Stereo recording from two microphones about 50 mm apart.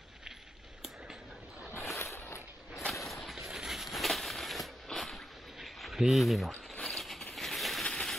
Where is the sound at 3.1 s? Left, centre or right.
Centre.